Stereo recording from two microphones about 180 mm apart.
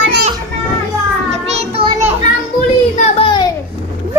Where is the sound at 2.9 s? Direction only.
40° left (ahead or behind).